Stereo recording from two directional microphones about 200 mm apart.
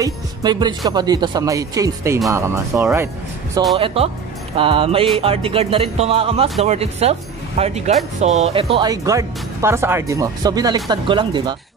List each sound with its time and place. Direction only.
0.0 s speech: 20° right (ahead or behind)
3.7 s speech: 30° right (ahead or behind)